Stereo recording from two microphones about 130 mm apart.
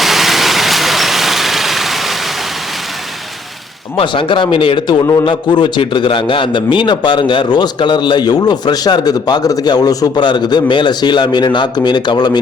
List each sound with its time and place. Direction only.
0.0 s vehicle: centre (ahead or behind)
3.9 s a man's voice: 40° left (ahead or behind)